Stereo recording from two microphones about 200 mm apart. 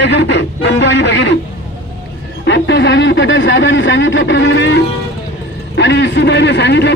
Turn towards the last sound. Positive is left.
turn(degrees=60)  # may be behind; listen again after turning